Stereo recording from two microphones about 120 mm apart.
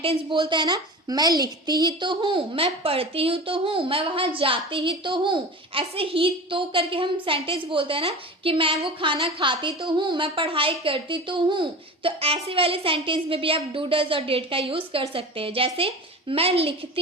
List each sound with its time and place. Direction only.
0.0 s a woman's voice: 50° right (ahead or behind)